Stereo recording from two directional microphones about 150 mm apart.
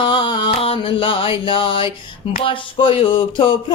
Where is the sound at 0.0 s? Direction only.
35° left (ahead or behind).